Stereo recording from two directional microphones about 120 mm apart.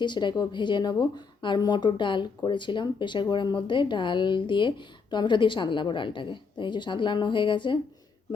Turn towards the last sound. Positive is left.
turn(degrees=40)  # may be behind; listen again after turning